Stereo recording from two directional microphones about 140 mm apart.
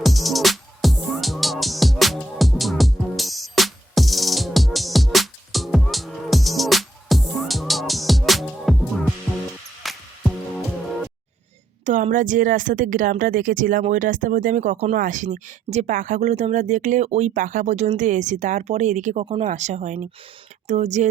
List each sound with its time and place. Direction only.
0.0 s music: centre (ahead or behind)
12.1 s speech: 70° right (ahead or behind)
14.9 s speech: 70° right (ahead or behind)